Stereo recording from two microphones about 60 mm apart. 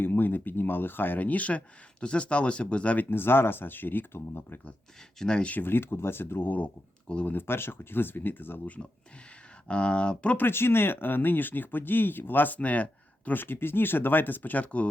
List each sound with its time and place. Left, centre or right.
0.0 s speech: left
3.1 s speech: left
5.2 s speech: centre
5.5 s speech: left
8.6 s speech: left
10.3 s speech: left
12.5 s speech: left